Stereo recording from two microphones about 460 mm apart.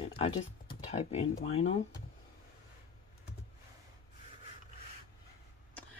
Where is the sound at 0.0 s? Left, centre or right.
Centre.